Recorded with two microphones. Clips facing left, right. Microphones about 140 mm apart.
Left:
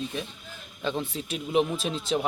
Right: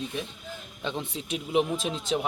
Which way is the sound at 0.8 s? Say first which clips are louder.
Left 3 dB; 20° right (ahead or behind).